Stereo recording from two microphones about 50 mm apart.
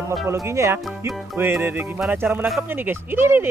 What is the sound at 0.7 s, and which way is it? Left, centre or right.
Speech, right.